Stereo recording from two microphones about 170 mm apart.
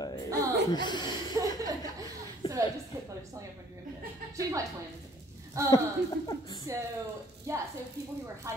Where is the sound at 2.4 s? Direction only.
35° left (ahead or behind).